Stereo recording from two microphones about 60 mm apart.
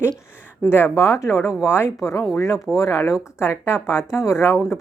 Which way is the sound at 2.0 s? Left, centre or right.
Left.